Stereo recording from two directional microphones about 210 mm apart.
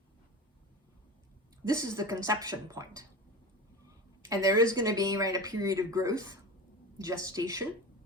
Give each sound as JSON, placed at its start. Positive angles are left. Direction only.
{"t": 1.6, "sound": "speech", "side_deg": -15}